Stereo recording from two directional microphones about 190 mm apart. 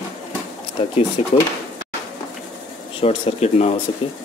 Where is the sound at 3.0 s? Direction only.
35° left (ahead or behind).